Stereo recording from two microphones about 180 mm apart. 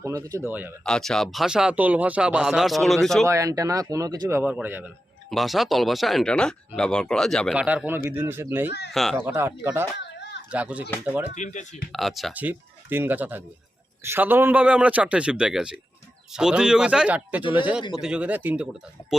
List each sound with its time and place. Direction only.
0.0 s a man's voice: 20° right (ahead or behind)
0.9 s speech: 5° left (ahead or behind)
3.2 s a man's voice: 20° right (ahead or behind)
8.9 s speech: centre (ahead or behind)
9.1 s a man's voice: 10° right (ahead or behind)
10.0 s a sound: 70° left (ahead or behind)
10.5 s a man's voice: 5° right (ahead or behind)
11.3 s speech: 45° left (ahead or behind)
11.9 s a man's voice: centre (ahead or behind)